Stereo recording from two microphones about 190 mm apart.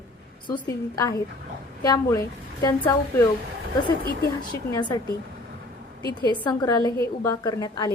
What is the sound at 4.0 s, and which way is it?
Speech, 50° left (ahead or behind).